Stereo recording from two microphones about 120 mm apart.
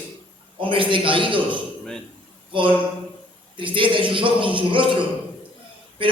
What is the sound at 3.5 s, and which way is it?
A man's voice, 45° right (ahead or behind).